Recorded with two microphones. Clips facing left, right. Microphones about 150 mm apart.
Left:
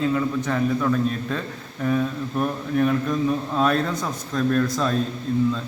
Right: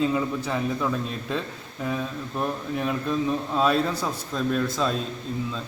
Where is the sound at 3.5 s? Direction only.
5° right (ahead or behind).